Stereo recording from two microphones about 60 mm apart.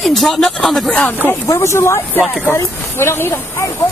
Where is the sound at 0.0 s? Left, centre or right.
Centre.